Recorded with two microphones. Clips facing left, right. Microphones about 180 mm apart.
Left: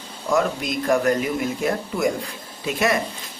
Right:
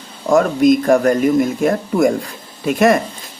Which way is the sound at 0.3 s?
45° right (ahead or behind).